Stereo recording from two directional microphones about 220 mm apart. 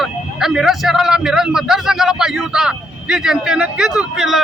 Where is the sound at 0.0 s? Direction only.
Centre (ahead or behind).